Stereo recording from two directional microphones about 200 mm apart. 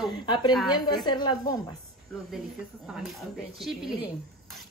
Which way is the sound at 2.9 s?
5° right (ahead or behind).